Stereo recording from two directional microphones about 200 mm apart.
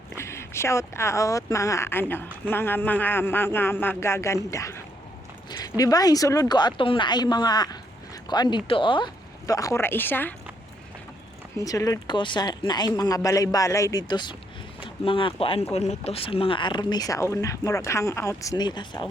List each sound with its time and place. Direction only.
0.2 s speech: 15° left (ahead or behind)
11.5 s speech: 15° left (ahead or behind)